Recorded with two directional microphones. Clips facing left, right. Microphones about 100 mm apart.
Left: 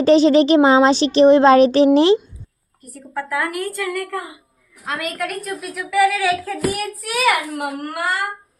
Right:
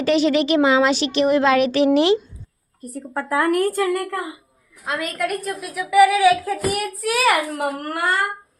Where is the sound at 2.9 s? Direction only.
30° right (ahead or behind).